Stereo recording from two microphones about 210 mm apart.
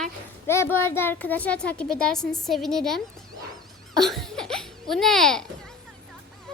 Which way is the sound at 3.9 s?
Centre (ahead or behind).